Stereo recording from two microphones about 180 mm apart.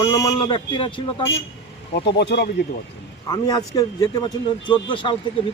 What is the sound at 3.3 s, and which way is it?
A man's voice, 20° left (ahead or behind).